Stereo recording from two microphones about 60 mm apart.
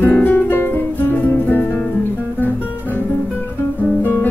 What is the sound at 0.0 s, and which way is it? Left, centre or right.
Guitar, left.